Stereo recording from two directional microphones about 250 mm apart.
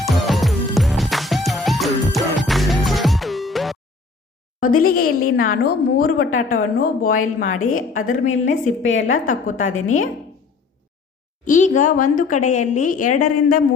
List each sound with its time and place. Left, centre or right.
0.0 s music: centre
5.2 s a woman's voice: left
9.6 s a woman's voice: left
11.4 s a woman's voice: left